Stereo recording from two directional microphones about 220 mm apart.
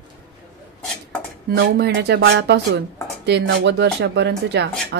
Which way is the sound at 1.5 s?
50° right (ahead or behind).